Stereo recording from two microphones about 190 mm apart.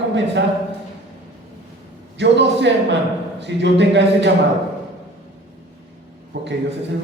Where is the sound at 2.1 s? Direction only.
65° right (ahead or behind).